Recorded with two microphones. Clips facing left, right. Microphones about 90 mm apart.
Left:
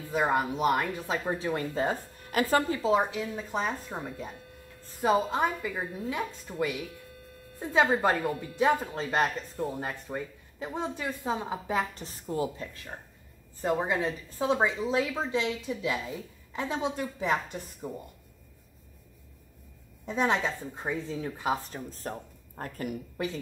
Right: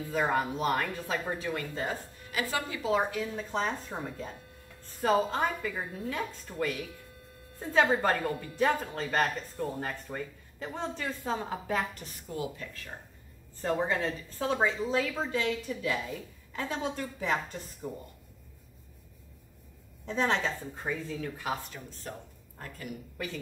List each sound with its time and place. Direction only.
0.1 s speech: 15° left (ahead or behind)
2.3 s speech: 45° left (ahead or behind)
2.8 s speech: 20° left (ahead or behind)
11.9 s a woman's voice: 30° left (ahead or behind)
13.6 s speech: 15° left (ahead or behind)
20.1 s a woman's voice: 15° left (ahead or behind)
21.6 s a woman's voice: 40° left (ahead or behind)